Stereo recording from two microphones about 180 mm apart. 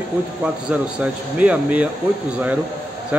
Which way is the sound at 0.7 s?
5° right (ahead or behind).